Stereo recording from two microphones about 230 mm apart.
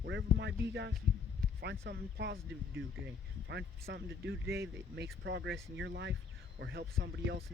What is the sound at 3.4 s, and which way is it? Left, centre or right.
Speech, right.